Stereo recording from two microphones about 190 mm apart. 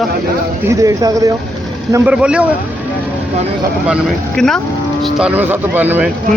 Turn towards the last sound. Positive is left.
turn(degrees=-10)  # may be behind; listen again after turning